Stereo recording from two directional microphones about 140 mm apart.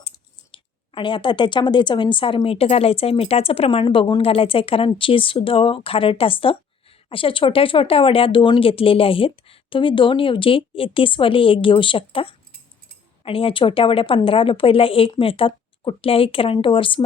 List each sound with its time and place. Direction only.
0.5 s speech: 35° left (ahead or behind)